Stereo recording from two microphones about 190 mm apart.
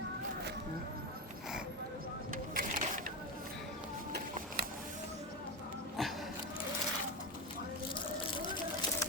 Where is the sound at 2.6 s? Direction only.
45° right (ahead or behind).